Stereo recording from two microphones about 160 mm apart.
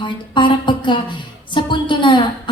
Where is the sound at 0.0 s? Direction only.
30° left (ahead or behind).